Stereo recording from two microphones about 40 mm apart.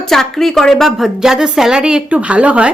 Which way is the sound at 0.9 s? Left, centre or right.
Centre.